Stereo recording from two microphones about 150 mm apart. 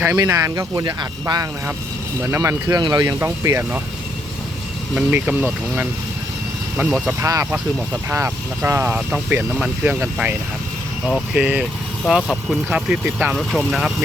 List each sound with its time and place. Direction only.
0.2 s speech: 20° right (ahead or behind)
4.9 s speech: 5° right (ahead or behind)
7.1 s speech: 20° right (ahead or behind); by 13.9 s 5° right (ahead or behind)